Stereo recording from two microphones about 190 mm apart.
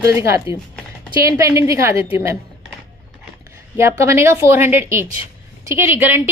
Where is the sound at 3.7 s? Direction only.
15° right (ahead or behind).